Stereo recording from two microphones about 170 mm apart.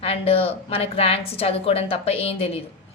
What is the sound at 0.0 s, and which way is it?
A woman's voice, 35° left (ahead or behind).